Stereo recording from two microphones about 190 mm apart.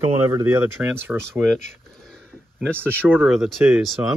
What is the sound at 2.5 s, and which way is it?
Speech, 10° right (ahead or behind).